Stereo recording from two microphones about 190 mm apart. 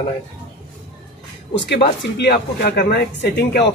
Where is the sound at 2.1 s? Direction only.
55° left (ahead or behind).